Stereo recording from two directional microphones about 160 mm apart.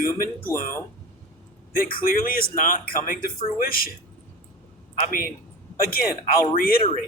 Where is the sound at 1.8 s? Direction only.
65° left (ahead or behind).